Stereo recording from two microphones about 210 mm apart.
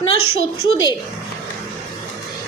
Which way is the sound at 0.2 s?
85° left.